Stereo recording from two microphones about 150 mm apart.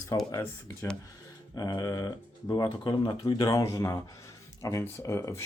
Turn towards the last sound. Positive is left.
turn(degrees=20)  # may be behind; listen again after turning